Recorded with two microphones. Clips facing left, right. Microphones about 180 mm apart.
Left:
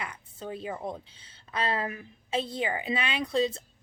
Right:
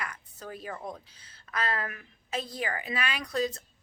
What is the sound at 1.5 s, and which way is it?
A woman's voice, 25° left (ahead or behind).